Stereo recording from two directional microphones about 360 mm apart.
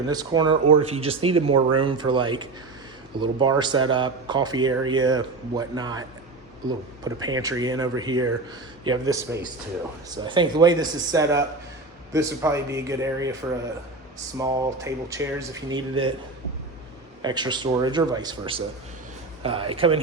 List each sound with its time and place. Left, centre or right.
0.1 s speech: centre
14.3 s speech: centre
17.2 s speech: centre